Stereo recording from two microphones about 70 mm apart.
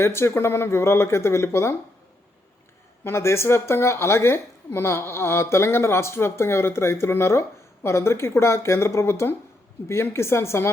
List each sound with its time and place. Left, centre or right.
0.0 s a woman's voice: left
3.0 s a woman's voice: left